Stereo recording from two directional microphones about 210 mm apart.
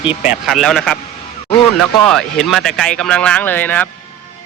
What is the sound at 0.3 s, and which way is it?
Speech, centre (ahead or behind).